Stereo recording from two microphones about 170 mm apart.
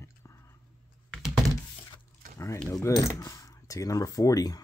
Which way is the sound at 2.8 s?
20° left (ahead or behind).